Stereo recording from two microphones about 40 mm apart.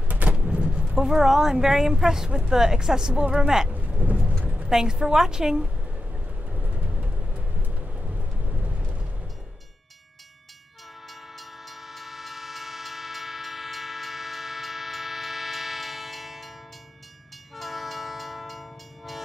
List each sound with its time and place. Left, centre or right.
0.1 s a sound: right
0.5 s a sound: right
0.9 s speech: centre
6.7 s vehicle: right
7.9 s thunder: right
11.3 s train: centre
17.6 s train: centre